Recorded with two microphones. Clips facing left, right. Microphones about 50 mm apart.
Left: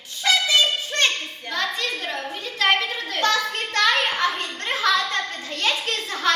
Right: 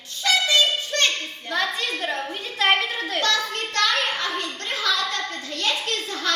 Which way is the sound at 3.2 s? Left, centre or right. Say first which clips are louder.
Left 4 dB; left.